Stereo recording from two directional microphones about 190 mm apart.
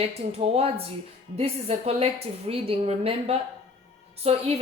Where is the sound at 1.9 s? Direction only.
30° right (ahead or behind).